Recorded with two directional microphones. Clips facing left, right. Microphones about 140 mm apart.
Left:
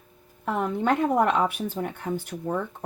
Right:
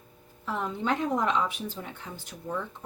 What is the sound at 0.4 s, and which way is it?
Speech, 60° left (ahead or behind).